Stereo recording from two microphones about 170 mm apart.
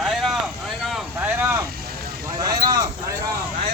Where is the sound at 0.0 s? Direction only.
Centre (ahead or behind).